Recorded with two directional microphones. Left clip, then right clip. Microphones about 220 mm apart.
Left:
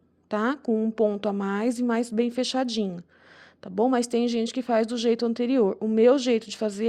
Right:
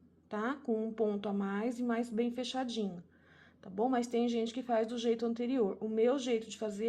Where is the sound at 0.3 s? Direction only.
45° left (ahead or behind).